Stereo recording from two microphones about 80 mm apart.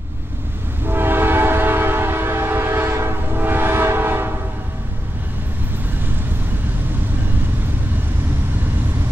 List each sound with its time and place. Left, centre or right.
0.8 s train: right